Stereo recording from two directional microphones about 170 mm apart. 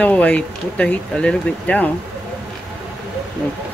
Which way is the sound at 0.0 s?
10° left (ahead or behind).